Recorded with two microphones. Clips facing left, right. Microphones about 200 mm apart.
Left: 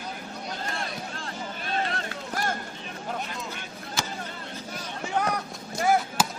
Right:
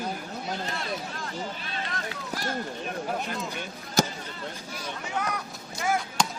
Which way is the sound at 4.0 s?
40° right (ahead or behind).